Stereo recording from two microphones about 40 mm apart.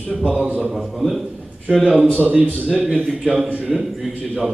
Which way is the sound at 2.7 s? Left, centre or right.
Right.